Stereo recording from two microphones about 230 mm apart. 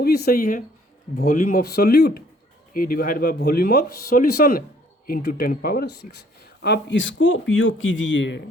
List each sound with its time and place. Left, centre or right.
0.0 s speech: left